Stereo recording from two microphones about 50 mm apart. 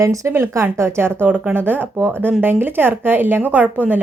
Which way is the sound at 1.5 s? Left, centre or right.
Right.